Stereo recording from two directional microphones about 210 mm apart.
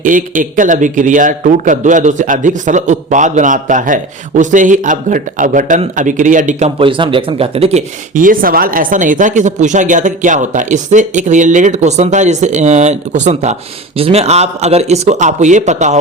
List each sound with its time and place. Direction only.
0.0 s a man's voice: 40° right (ahead or behind)